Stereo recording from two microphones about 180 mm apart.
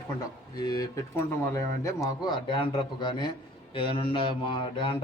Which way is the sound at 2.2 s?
25° left (ahead or behind).